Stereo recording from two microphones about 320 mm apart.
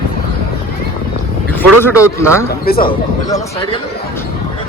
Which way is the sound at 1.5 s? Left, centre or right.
Centre.